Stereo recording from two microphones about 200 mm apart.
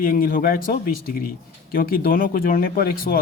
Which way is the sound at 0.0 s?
45° left (ahead or behind).